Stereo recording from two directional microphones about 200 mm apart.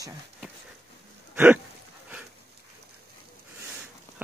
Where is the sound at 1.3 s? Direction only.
10° right (ahead or behind).